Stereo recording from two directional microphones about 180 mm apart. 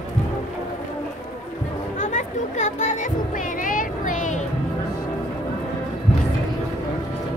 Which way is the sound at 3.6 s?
50° left (ahead or behind).